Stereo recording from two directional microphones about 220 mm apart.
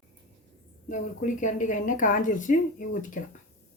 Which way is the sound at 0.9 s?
35° left (ahead or behind).